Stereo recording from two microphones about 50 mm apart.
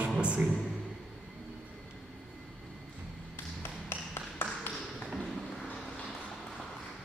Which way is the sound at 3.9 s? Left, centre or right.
Left.